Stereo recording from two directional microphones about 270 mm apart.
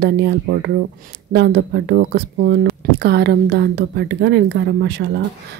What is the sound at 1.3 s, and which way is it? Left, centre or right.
Speech, right.